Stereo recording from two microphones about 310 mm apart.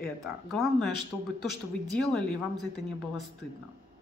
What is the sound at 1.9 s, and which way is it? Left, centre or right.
Speech, centre.